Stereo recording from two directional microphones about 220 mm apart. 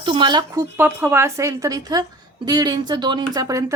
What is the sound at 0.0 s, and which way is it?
A woman's voice, 20° right (ahead or behind).